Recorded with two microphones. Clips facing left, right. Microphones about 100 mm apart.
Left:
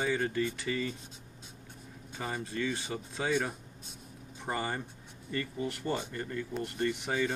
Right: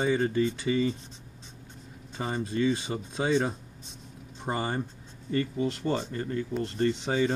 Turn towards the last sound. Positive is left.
turn(degrees=-20)  # may be behind; listen again after turning